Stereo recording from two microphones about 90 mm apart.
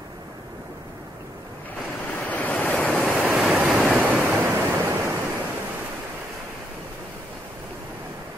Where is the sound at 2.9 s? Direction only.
Centre (ahead or behind).